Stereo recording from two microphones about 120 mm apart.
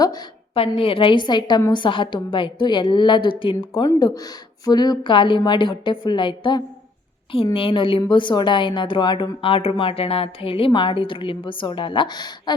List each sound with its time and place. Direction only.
0.5 s a woman's voice: 50° left (ahead or behind)
3.8 s a woman's voice: 30° left (ahead or behind)